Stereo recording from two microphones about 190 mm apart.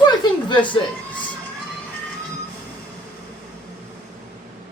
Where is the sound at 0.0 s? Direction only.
25° left (ahead or behind).